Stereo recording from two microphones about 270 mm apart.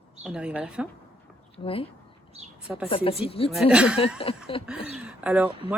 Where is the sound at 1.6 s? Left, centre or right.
Left.